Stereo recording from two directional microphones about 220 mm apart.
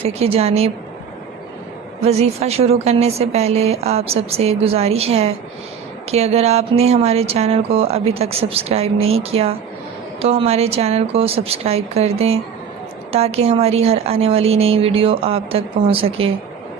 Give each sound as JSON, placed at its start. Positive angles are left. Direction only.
{"t": 0.0, "sound": "speech", "side_deg": -30}
{"t": 2.0, "sound": "speech", "side_deg": -30}